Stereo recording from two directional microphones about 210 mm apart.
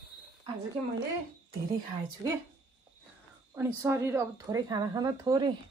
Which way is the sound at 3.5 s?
10° right (ahead or behind).